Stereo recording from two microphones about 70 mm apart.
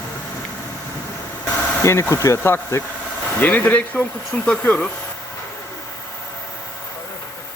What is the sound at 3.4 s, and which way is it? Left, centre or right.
Speech, left.